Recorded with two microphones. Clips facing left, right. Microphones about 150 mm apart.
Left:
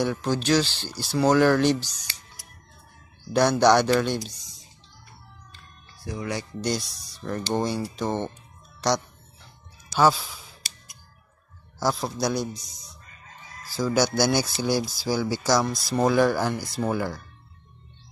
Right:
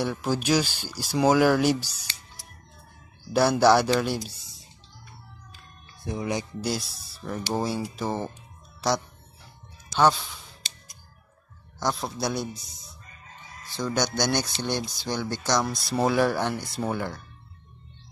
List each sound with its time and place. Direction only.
0.0 s speech: 5° right (ahead or behind)
3.3 s speech: 5° right (ahead or behind)
5.9 s speech: 20° right (ahead or behind)
6.6 s speech: 5° right (ahead or behind)
8.8 s music: 5° right (ahead or behind)
9.9 s speech: 5° left (ahead or behind)
11.8 s speech: centre (ahead or behind)